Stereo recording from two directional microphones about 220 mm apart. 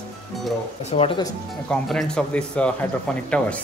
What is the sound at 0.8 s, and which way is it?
Speech, 25° left (ahead or behind).